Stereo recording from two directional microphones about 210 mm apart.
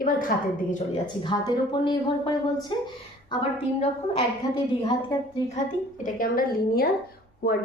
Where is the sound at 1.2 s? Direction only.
20° left (ahead or behind).